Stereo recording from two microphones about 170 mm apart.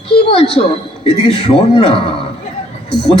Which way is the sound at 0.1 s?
30° left (ahead or behind).